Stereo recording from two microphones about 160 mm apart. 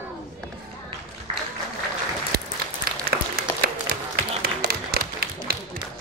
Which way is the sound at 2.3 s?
70° right (ahead or behind).